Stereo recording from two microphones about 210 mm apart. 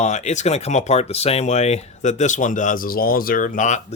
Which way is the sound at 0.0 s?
35° left (ahead or behind).